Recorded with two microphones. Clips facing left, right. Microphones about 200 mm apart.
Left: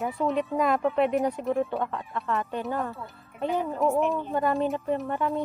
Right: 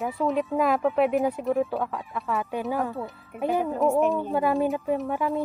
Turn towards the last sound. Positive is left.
turn(degrees=0)  # may be behind; listen again after turning